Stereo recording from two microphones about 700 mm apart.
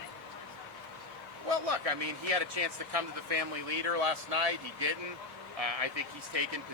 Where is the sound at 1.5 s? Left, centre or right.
Right.